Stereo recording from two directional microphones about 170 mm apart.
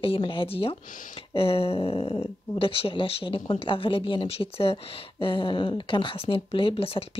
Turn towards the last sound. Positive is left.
turn(degrees=35)  # may be behind; listen again after turning